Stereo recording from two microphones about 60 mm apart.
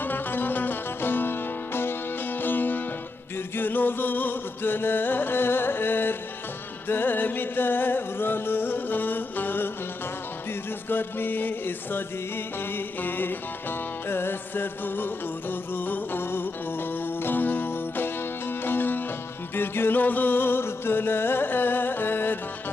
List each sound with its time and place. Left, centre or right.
0.0 s music: left
10.8 s music: left